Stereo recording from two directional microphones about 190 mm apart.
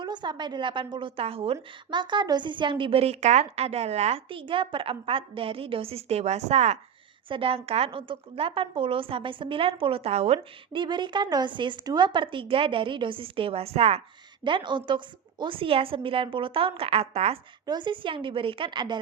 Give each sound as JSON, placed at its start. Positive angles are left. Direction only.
{"t": 0.0, "sound": "a woman's voice", "side_deg": -25}